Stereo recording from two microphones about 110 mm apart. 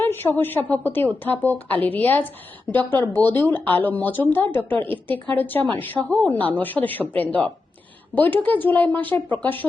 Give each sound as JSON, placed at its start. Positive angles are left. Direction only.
{"t": 0.0, "sound": "a woman's voice", "side_deg": 20}